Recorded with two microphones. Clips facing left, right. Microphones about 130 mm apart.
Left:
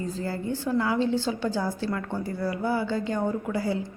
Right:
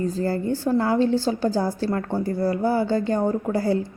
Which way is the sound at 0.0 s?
45° right (ahead or behind).